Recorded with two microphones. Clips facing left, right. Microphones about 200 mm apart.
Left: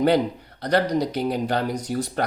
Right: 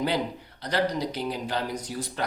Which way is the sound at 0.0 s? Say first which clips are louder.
Left 8 dB; 55° left (ahead or behind).